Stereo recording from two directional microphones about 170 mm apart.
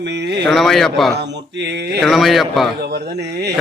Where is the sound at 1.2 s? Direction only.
90° right.